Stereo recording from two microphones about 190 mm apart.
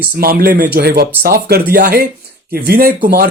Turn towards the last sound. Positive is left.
turn(degrees=-50)  # may be behind; listen again after turning